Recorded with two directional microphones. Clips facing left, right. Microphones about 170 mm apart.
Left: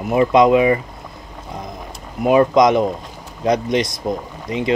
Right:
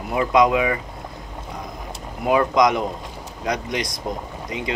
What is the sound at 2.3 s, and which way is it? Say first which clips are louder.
Speech: left 5 dB; 25° left (ahead or behind).